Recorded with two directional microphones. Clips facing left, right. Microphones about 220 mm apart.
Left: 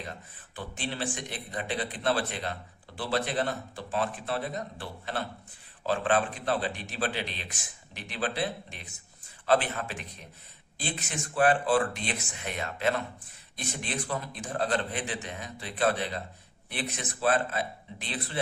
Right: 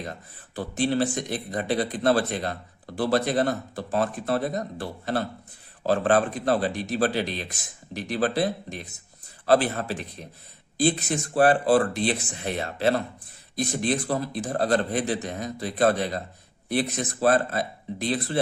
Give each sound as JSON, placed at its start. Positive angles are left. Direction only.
{"t": 0.0, "sound": "speech", "side_deg": -40}